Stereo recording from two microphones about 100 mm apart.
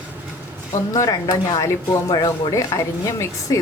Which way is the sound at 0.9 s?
40° left (ahead or behind).